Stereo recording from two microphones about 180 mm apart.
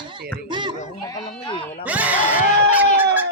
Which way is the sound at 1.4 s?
30° left (ahead or behind).